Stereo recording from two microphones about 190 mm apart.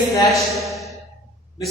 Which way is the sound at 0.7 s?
Centre (ahead or behind).